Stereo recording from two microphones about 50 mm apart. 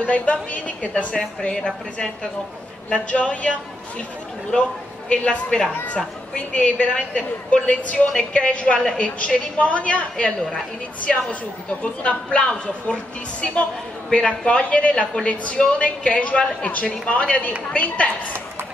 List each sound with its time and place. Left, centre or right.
0.0 s a woman's voice: left
3.1 s a woman's voice: left
5.1 s a woman's voice: left
8.7 s a woman's voice: centre
9.0 s a woman's voice: left
11.8 s a woman's voice: left